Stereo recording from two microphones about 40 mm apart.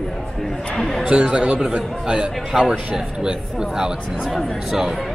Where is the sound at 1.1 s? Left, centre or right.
Right.